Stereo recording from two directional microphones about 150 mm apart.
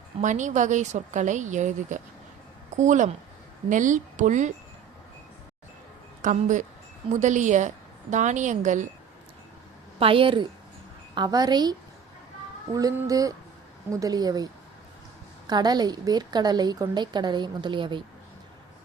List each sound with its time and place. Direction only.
0.2 s a woman's voice: 55° right (ahead or behind)
6.2 s a woman's voice: 55° right (ahead or behind)
10.0 s a woman's voice: 35° right (ahead or behind)